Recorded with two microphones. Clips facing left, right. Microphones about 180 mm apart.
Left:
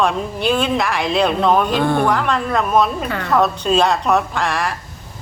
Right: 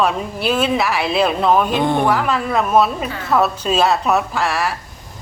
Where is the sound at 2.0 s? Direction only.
5° right (ahead or behind).